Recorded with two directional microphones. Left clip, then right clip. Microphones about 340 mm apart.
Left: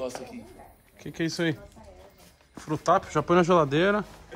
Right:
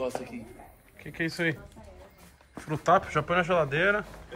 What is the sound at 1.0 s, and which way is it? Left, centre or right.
Speech, centre.